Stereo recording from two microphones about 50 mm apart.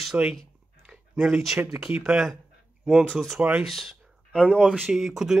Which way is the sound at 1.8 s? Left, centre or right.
Centre.